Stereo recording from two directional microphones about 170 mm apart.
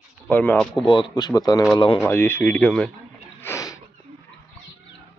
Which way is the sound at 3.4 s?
20° left (ahead or behind).